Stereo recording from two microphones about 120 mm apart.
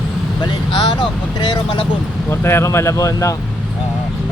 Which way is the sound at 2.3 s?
20° left (ahead or behind).